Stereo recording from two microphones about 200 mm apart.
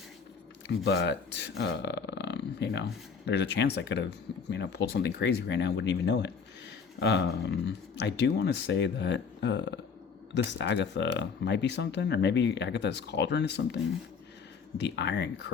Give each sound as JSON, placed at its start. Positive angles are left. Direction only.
{"t": 0.7, "sound": "speech", "side_deg": 60}
{"t": 14.8, "sound": "speech", "side_deg": 60}